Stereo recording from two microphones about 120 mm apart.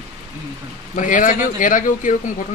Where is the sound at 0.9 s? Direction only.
90° left.